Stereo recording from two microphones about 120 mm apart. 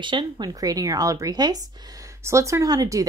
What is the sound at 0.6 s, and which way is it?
A woman's voice, 30° right (ahead or behind).